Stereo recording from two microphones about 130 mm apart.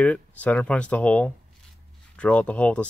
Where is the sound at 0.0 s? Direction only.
10° left (ahead or behind).